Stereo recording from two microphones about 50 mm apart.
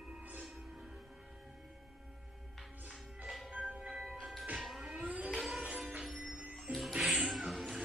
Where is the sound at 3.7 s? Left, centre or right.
Centre.